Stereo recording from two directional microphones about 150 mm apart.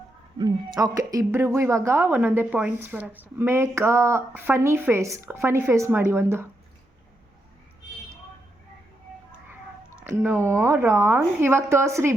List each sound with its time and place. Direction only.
0.3 s speech: 30° right (ahead or behind)
10.0 s speech: 15° right (ahead or behind)